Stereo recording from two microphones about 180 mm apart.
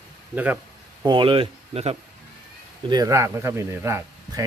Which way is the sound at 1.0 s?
25° right (ahead or behind).